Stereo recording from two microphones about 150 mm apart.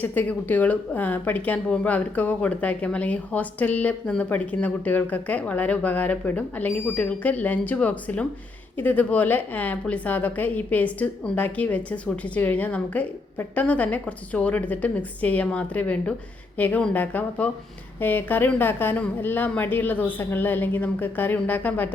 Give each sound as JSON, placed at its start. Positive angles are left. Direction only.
{"t": 0.0, "sound": "speech", "side_deg": 10}